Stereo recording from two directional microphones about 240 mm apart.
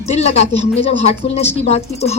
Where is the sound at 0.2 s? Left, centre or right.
Left.